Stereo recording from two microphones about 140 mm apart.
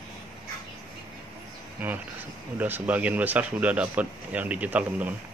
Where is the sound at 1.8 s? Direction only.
15° right (ahead or behind).